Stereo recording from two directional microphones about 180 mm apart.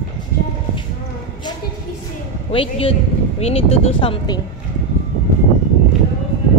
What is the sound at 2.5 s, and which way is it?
A woman's voice, 30° left (ahead or behind).